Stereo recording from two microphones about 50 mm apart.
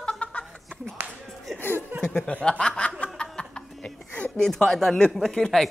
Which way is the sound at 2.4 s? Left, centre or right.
Centre.